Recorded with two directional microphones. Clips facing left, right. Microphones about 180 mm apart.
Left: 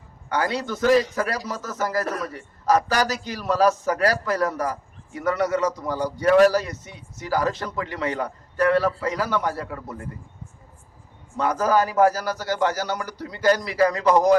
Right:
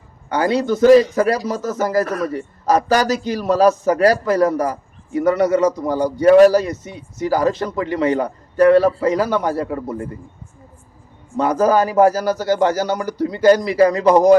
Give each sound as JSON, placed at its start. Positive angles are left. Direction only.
{"t": 0.3, "sound": "a man's voice", "side_deg": -20}
{"t": 11.3, "sound": "a man's voice", "side_deg": -20}